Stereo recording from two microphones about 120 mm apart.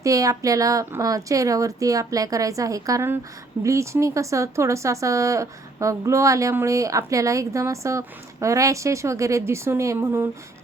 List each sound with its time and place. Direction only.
0.0 s speech: 30° right (ahead or behind)